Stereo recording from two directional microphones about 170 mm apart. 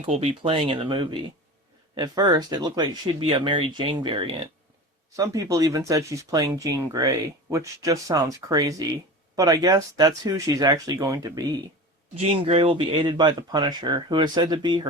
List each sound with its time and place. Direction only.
0.0 s speech: 40° right (ahead or behind)
5.1 s speech: 20° right (ahead or behind)
12.1 s speech: 35° right (ahead or behind)